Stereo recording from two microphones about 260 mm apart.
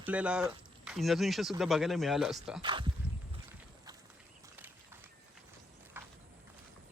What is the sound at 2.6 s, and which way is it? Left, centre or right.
Speech, centre.